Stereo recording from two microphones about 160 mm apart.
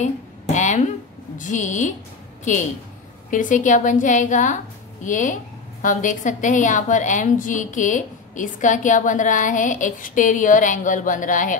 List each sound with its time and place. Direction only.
0.6 s a sound: 50° left (ahead or behind)
1.4 s a woman's voice: 50° left (ahead or behind)
3.3 s a woman's voice: 55° left (ahead or behind)